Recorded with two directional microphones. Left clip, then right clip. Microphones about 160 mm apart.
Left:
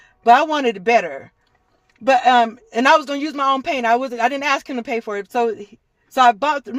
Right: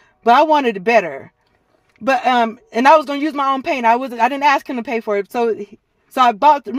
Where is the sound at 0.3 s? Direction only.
40° right (ahead or behind).